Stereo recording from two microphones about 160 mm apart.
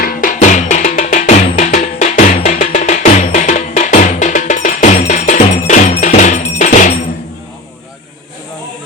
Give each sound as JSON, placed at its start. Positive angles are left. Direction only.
{"t": 0.0, "sound": "percussion", "side_deg": 60}